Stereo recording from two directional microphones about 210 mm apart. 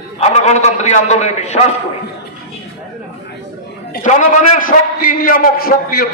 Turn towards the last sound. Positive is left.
turn(degrees=45)  # may be behind; listen again after turning